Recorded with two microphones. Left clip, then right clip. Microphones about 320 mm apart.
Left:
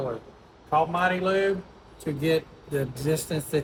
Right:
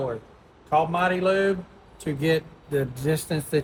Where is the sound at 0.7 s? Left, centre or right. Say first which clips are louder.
Right 1 dB; right.